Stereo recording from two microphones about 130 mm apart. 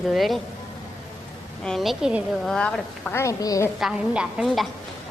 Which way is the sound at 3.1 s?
25° left (ahead or behind).